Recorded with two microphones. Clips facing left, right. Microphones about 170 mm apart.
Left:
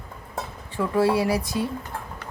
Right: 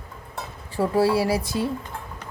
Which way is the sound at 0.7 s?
35° right (ahead or behind).